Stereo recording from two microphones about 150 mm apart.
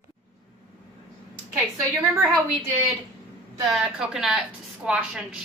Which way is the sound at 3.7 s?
Centre (ahead or behind).